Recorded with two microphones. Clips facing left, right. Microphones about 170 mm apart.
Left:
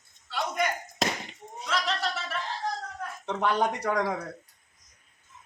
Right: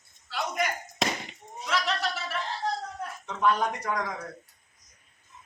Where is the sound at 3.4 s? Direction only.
70° left (ahead or behind).